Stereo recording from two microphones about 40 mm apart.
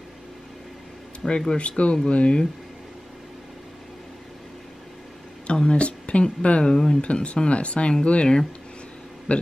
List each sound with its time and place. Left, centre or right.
1.2 s speech: centre
1.6 s speech: left
5.5 s a sound: left
6.6 s speech: centre
7.0 s speech: left